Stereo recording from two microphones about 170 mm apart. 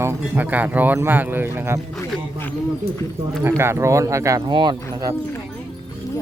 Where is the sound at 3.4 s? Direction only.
15° right (ahead or behind).